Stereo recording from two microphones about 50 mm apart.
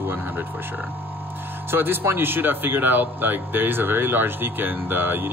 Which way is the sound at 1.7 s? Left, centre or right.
Right.